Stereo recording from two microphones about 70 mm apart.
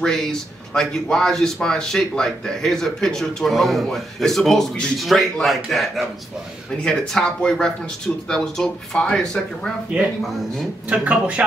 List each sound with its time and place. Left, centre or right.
0.0 s speech: centre
10.9 s speech: centre